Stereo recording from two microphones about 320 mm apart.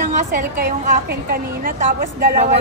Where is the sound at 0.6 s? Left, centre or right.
Right.